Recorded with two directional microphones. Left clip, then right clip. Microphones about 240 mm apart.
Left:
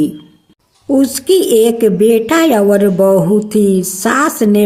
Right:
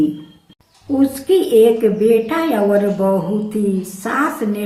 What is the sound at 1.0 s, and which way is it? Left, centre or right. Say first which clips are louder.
A woman's voice: left 2 dB; left.